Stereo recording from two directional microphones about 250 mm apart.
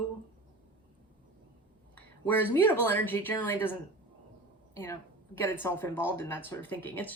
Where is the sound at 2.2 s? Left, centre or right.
Centre.